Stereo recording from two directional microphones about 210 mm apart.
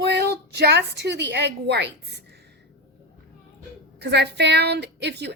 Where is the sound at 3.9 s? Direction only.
55° right (ahead or behind).